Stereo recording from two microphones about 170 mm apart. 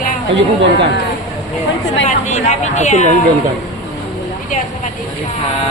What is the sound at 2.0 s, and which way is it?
A woman's voice, 45° left (ahead or behind).